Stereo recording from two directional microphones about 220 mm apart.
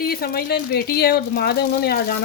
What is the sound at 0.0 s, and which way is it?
Speech, 45° left (ahead or behind).